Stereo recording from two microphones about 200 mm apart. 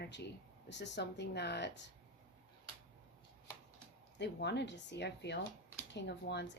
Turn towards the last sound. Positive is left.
turn(degrees=60)  # may be behind; listen again after turning